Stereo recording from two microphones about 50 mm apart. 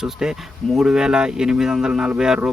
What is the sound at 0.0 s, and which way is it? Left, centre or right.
Speech, centre.